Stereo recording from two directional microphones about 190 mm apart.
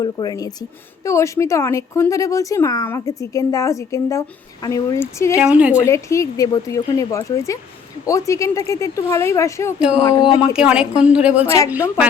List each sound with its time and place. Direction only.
0.0 s speech: 20° left (ahead or behind)
5.4 s a woman's voice: 5° right (ahead or behind)
5.8 s speech: 15° left (ahead or behind)
10.5 s a woman's voice: 5° right (ahead or behind)
11.4 s speech: 15° left (ahead or behind)